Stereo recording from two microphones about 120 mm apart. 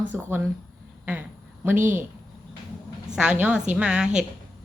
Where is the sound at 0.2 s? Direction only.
15° right (ahead or behind).